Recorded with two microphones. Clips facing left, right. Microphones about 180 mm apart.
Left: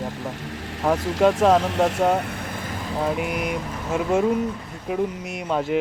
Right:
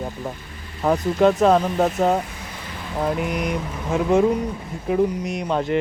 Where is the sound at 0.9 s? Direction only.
90° left.